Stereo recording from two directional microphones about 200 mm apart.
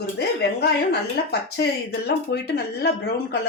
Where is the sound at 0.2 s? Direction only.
55° left (ahead or behind).